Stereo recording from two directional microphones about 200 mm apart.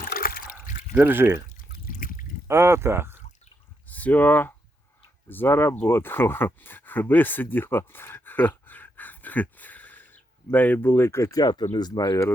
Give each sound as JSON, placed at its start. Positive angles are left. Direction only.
{"t": 0.0, "sound": "trickle", "side_deg": 45}
{"t": 0.9, "sound": "speech", "side_deg": -10}
{"t": 1.5, "sound": "drip", "side_deg": 45}
{"t": 2.5, "sound": "speech", "side_deg": -15}
{"t": 3.8, "sound": "speech", "side_deg": 10}